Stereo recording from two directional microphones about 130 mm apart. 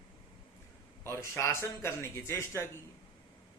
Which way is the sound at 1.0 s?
20° left (ahead or behind).